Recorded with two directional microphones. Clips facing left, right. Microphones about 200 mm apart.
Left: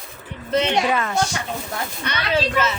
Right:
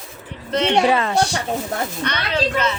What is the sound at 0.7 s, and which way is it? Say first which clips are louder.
Speech: right 4 dB; 30° right (ahead or behind).